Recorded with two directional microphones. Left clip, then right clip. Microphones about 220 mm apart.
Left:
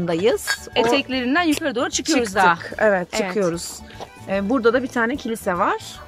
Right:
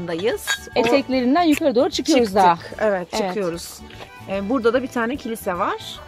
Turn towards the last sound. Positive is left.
turn(degrees=0)  # may be behind; listen again after turning